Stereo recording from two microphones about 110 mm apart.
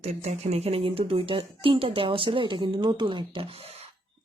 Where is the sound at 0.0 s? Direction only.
75° right (ahead or behind).